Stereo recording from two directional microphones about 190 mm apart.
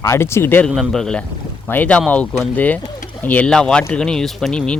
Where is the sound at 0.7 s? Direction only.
Centre (ahead or behind).